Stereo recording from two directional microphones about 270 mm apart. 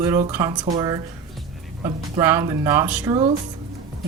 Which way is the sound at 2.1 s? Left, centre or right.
Centre.